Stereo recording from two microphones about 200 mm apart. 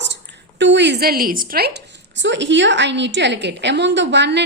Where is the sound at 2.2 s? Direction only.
65° right (ahead or behind).